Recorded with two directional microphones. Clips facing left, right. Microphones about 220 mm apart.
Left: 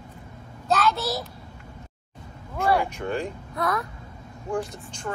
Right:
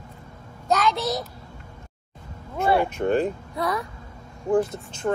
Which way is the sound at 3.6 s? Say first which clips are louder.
Even; centre (ahead or behind).